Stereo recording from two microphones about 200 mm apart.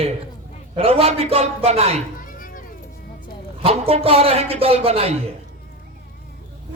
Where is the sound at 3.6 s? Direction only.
30° right (ahead or behind).